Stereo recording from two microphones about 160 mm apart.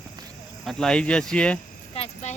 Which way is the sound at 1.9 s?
40° left (ahead or behind).